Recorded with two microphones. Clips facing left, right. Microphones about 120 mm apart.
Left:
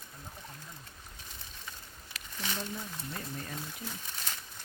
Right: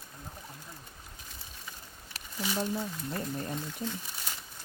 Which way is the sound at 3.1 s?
30° right (ahead or behind).